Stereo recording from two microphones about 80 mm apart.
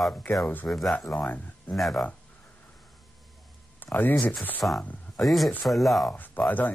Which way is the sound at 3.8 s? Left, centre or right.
Left.